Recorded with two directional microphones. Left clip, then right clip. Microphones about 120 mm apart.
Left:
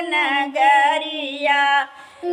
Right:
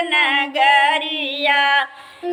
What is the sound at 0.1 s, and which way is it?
Female singing, 20° right (ahead or behind).